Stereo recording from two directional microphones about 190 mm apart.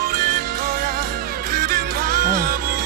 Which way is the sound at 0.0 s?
50° right (ahead or behind).